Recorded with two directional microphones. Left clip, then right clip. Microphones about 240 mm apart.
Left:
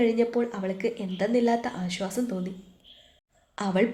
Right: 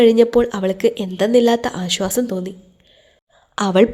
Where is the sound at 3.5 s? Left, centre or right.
Right.